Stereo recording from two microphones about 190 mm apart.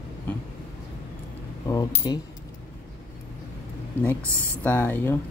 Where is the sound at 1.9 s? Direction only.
25° left (ahead or behind).